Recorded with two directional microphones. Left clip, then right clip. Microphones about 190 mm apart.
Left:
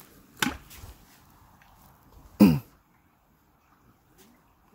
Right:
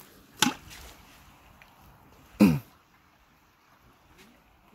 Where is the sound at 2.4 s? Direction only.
30° left (ahead or behind).